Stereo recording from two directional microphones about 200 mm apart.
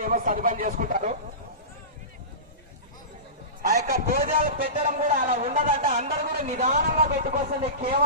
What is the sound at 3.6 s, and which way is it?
A man's voice, 45° right (ahead or behind).